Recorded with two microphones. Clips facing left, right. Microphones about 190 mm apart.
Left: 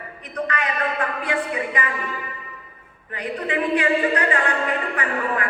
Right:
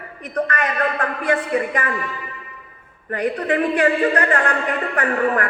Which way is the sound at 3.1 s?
45° right (ahead or behind).